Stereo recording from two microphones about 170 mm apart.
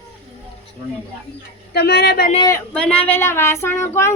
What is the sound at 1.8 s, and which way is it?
Speech, 70° left (ahead or behind).